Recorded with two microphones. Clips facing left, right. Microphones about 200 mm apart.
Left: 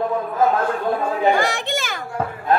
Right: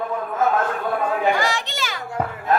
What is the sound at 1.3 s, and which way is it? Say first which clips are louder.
Chatter: left 3 dB; 55° left (ahead or behind).